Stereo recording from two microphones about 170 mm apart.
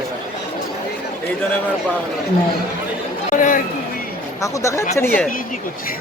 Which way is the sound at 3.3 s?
50° left (ahead or behind).